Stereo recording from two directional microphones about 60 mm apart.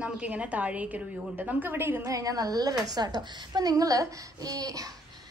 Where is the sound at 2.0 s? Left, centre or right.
Right.